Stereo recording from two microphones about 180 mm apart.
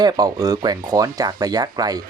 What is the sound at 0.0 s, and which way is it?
Speech, 20° right (ahead or behind).